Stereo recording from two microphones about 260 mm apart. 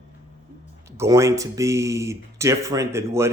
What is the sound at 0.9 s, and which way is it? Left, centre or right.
Speech, centre.